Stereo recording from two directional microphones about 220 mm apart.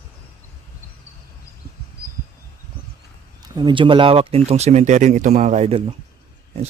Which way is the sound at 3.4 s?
20° right (ahead or behind).